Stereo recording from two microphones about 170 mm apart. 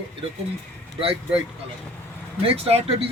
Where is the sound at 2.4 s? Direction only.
35° right (ahead or behind).